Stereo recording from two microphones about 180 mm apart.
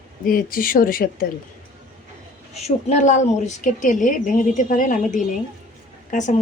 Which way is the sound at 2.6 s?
40° left (ahead or behind).